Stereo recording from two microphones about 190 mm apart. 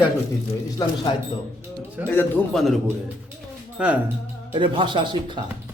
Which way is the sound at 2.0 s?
10° left (ahead or behind).